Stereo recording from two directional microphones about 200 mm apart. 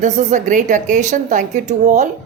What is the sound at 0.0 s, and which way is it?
A woman's voice, 40° right (ahead or behind).